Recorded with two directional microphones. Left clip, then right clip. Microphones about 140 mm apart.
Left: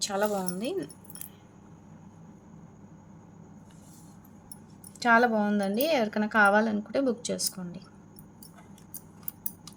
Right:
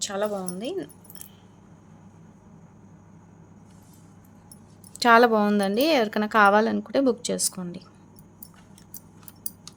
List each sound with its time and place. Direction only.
0.0 s speech: 15° right (ahead or behind)
4.9 s speech: 55° right (ahead or behind); by 7.9 s 35° right (ahead or behind)